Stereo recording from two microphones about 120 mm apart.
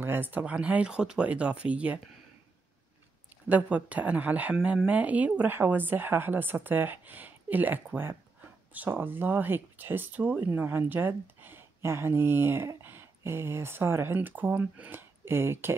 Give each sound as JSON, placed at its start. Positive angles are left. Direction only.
{"t": 0.0, "sound": "speech", "side_deg": -15}
{"t": 3.4, "sound": "speech", "side_deg": -10}